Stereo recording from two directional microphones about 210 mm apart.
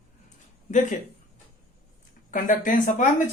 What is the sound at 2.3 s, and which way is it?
Speech, 40° left (ahead or behind).